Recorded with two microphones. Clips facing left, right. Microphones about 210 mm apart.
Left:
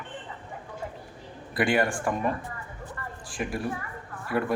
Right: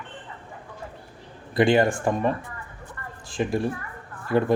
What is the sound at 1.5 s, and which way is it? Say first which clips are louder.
Speech: right 5 dB; 25° right (ahead or behind).